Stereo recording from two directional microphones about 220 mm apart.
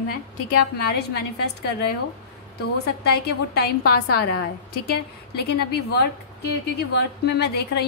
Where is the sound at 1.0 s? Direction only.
45° left (ahead or behind).